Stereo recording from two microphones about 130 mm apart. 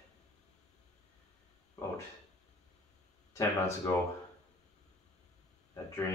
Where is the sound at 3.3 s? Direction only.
25° left (ahead or behind).